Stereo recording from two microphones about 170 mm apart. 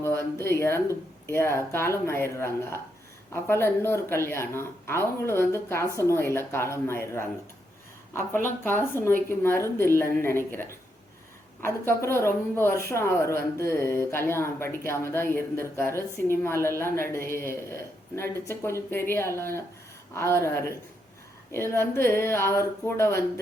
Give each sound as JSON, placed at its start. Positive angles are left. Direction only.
{"t": 0.0, "sound": "a woman's voice", "side_deg": 15}